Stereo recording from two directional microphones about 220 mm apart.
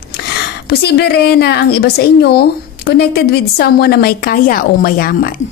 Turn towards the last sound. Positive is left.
turn(degrees=40)  # may be behind; listen again after turning